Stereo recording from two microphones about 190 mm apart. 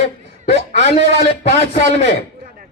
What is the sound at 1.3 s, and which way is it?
Speech, 35° left (ahead or behind).